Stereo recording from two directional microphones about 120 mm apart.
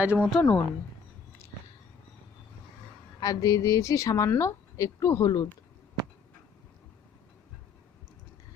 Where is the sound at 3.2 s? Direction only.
30° left (ahead or behind).